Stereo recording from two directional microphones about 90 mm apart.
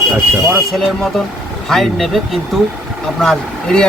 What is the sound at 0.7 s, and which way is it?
Speech, 5° left (ahead or behind).